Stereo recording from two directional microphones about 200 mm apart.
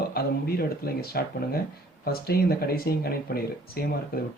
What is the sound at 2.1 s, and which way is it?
Speech, 50° left (ahead or behind).